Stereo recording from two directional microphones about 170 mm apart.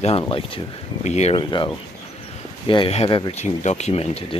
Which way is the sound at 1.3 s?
25° left (ahead or behind).